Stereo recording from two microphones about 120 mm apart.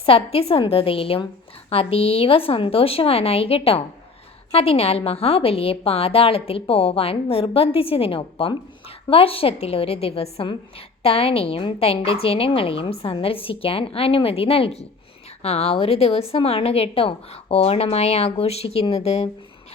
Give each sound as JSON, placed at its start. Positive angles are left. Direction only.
{"t": 0.0, "sound": "a woman's voice", "side_deg": 55}